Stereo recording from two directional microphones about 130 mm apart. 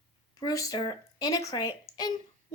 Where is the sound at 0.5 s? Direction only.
25° left (ahead or behind).